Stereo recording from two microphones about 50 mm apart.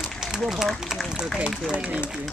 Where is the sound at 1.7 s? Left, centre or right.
Right.